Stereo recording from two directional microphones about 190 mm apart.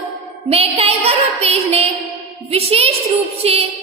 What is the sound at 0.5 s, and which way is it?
A woman's voice, 30° right (ahead or behind).